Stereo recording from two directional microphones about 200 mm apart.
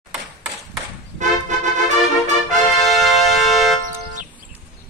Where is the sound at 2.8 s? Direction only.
Centre (ahead or behind).